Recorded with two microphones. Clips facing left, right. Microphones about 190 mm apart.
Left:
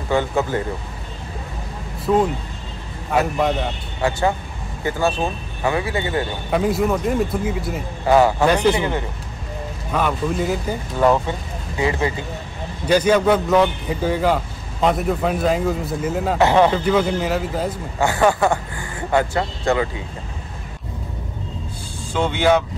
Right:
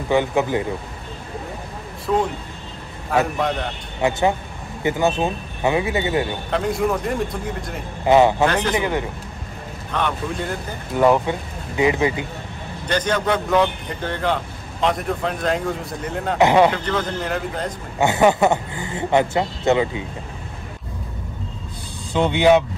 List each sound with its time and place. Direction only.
0.1 s speech: 15° right (ahead or behind)
2.1 s a man's voice: 5° left (ahead or behind)
4.0 s a man's voice: 20° right (ahead or behind)
6.5 s a man's voice: 5° left (ahead or behind)
8.1 s a man's voice: 20° right (ahead or behind)
9.9 s a man's voice: 5° left (ahead or behind)
11.0 s speech: 15° right (ahead or behind)
12.8 s a man's voice: 10° left (ahead or behind)
16.3 s speech: 15° right (ahead or behind)
16.7 s a man's voice: 10° left (ahead or behind)
17.9 s a man's voice: 20° right (ahead or behind)
22.1 s speech: 20° right (ahead or behind)